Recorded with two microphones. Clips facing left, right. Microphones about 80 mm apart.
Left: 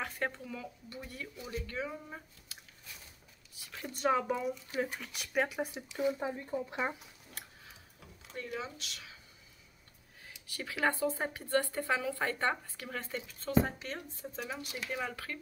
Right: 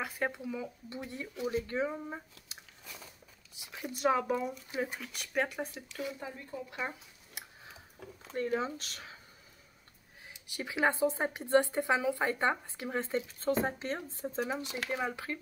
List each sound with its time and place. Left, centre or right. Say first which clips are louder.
0.0 s a woman's voice: right 2 dB; centre
3.8 s speech: right 1 dB; centre
6.0 s speech: left 11 dB; left
7.4 s a sound: right 2 dB; centre
8.4 s speech: right 8 dB; right
10.2 s a woman's voice: right 2 dB; centre